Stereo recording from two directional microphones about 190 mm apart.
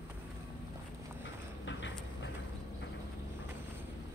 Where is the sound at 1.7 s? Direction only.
75° left (ahead or behind).